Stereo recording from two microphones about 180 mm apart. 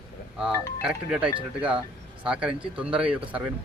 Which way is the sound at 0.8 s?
5° right (ahead or behind).